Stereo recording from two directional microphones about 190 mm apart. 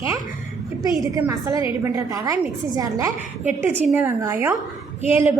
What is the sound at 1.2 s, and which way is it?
A woman's voice, 15° right (ahead or behind).